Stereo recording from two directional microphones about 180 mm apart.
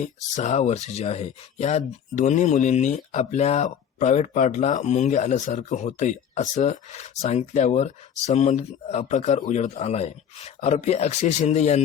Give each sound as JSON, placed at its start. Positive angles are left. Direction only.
{"t": 0.0, "sound": "speech", "side_deg": 40}